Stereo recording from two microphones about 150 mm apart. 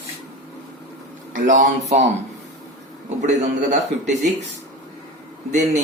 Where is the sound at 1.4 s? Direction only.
60° right (ahead or behind).